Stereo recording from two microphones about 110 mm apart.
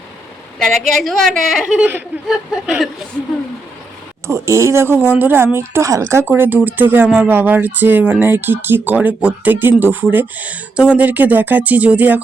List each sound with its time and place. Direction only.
0.6 s a woman's voice: centre (ahead or behind)
4.3 s speech: 25° right (ahead or behind)